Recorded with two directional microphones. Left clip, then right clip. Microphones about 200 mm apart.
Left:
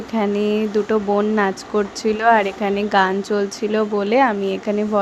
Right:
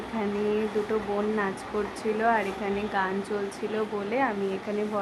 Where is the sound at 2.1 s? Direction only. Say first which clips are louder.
Left 10 dB; 40° left (ahead or behind).